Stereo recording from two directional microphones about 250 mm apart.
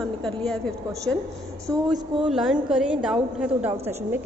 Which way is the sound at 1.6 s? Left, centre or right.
Centre.